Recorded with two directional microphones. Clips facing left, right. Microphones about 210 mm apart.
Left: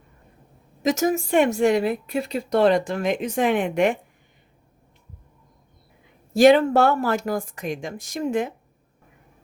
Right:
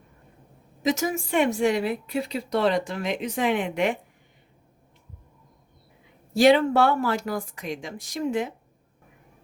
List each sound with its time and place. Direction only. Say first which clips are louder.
0.8 s a woman's voice: left 4 dB; 45° left (ahead or behind)
6.3 s a woman's voice: left 3 dB; 45° left (ahead or behind)